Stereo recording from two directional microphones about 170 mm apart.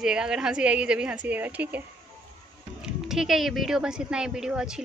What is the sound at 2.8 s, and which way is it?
Speech, 5° right (ahead or behind).